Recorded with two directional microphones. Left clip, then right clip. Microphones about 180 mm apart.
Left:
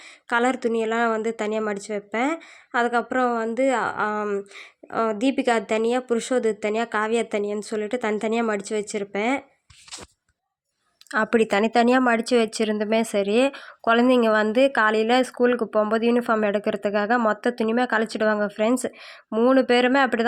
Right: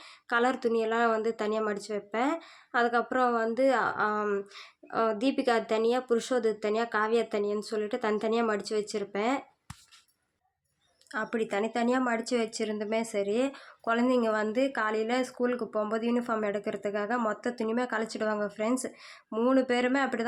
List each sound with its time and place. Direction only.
0.3 s speech: 30° left (ahead or behind)
11.1 s speech: 45° left (ahead or behind)